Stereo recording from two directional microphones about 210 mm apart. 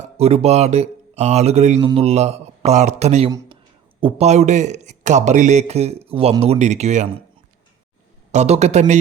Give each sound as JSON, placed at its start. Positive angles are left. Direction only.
{"t": 0.0, "sound": "a man's voice", "side_deg": -30}
{"t": 3.2, "sound": "a sound", "side_deg": -20}
{"t": 4.0, "sound": "a man's voice", "side_deg": -30}
{"t": 8.3, "sound": "a man's voice", "side_deg": -30}